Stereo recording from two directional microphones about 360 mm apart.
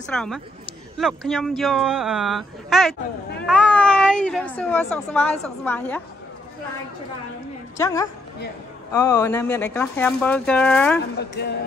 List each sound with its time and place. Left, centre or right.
0.1 s speech: centre
7.7 s a woman's voice: centre
11.1 s a woman's voice: left